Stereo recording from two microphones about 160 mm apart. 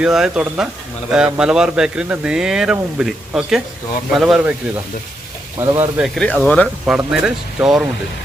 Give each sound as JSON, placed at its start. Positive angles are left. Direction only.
{"t": 0.0, "sound": "speech", "side_deg": -5}
{"t": 5.5, "sound": "speech", "side_deg": -15}
{"t": 6.0, "sound": "speech", "side_deg": 5}
{"t": 6.8, "sound": "speech", "side_deg": -5}